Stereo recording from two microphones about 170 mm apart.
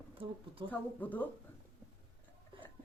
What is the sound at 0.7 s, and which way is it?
Speech, 10° left (ahead or behind).